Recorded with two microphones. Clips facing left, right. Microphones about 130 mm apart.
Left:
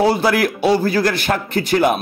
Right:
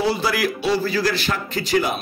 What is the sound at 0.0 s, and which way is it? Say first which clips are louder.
A man's voice: left 6 dB; 55° left (ahead or behind).